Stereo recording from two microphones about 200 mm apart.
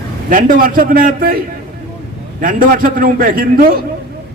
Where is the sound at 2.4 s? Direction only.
45° right (ahead or behind).